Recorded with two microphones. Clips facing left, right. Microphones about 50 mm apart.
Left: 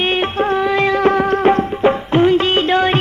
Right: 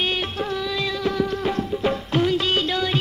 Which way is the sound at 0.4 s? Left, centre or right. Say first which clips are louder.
Left 10 dB; left.